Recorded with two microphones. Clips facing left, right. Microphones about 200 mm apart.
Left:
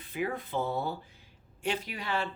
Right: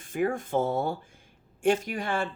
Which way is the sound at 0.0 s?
50° right (ahead or behind).